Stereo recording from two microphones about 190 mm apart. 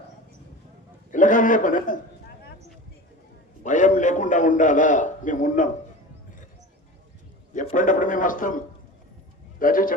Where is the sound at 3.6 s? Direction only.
40° left (ahead or behind).